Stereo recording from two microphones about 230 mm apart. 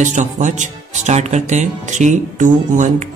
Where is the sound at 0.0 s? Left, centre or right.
Right.